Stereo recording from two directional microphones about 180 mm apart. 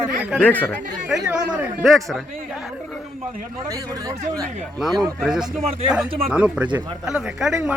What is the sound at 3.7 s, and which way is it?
Speech, 20° right (ahead or behind).